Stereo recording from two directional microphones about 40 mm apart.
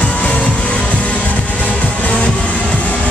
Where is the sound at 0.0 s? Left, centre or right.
Left.